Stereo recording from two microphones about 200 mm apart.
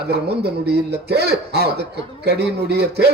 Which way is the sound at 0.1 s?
55° right (ahead or behind).